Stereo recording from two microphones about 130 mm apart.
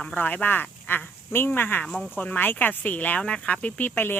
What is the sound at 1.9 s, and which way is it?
Speech, centre (ahead or behind).